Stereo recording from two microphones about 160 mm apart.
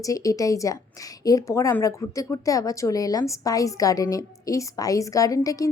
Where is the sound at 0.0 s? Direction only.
20° left (ahead or behind).